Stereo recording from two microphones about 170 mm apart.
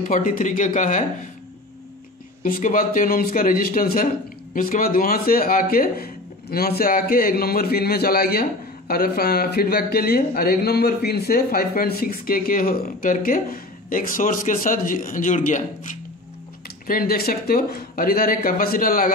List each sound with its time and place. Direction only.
0.1 s speech: 55° left (ahead or behind)
2.4 s speech: 55° left (ahead or behind)